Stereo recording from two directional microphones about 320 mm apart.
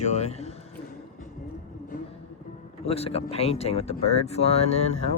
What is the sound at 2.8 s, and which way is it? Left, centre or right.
Speech, centre.